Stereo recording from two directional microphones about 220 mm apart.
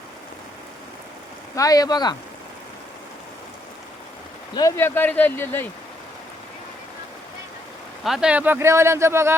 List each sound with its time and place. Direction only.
1.5 s speech: 15° left (ahead or behind)
4.5 s speech: 15° left (ahead or behind)
8.0 s speech: centre (ahead or behind)